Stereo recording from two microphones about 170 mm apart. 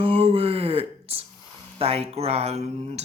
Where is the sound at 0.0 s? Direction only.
30° right (ahead or behind).